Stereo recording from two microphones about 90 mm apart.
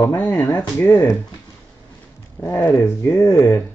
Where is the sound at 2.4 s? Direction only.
20° left (ahead or behind).